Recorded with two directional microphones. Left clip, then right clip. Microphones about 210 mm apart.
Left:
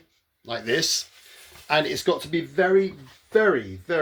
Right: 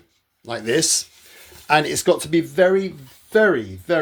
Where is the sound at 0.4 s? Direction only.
45° right (ahead or behind).